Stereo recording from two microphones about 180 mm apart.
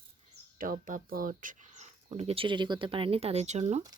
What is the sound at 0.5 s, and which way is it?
Speech, 50° right (ahead or behind).